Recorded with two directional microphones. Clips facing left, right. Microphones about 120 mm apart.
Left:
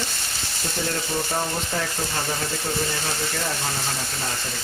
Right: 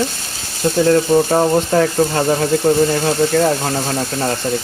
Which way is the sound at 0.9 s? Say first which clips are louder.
Right 15 dB; 55° right (ahead or behind).